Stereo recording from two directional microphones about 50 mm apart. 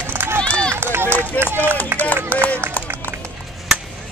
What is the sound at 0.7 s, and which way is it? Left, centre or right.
Run, right.